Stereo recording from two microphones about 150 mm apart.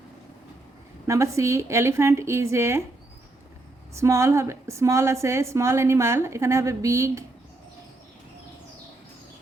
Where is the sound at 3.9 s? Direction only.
20° right (ahead or behind).